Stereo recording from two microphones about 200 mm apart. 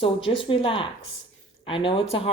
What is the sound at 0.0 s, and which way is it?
Speech, 25° left (ahead or behind).